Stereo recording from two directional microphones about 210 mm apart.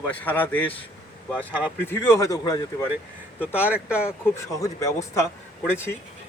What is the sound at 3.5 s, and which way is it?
Speech, 5° right (ahead or behind).